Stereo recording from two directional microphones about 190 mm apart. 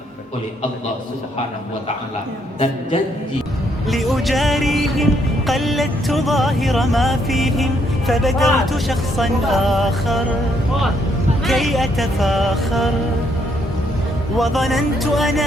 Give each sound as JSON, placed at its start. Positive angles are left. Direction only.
{"t": 3.8, "sound": "speech", "side_deg": 0}
{"t": 11.4, "sound": "speech", "side_deg": 0}
{"t": 14.3, "sound": "speech", "side_deg": 0}